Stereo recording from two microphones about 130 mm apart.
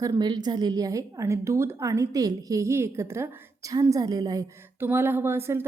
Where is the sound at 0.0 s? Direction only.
30° right (ahead or behind).